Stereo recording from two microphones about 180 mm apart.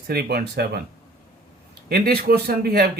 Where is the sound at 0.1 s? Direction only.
60° right (ahead or behind).